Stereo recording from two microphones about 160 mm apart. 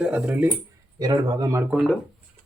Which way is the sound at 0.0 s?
10° right (ahead or behind).